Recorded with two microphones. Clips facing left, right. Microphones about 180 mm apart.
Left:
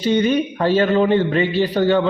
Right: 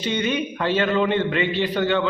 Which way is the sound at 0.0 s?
40° left (ahead or behind).